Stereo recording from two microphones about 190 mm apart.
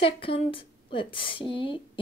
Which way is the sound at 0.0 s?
30° left (ahead or behind).